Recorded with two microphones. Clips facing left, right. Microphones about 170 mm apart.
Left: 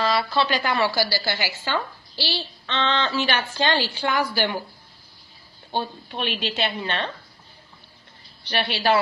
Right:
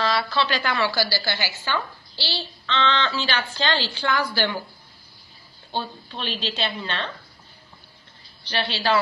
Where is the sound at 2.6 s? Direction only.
45° left (ahead or behind).